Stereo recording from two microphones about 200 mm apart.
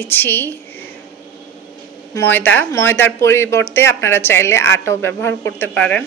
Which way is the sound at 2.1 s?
10° left (ahead or behind).